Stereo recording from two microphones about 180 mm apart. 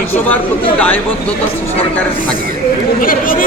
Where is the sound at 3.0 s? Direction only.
50° left (ahead or behind).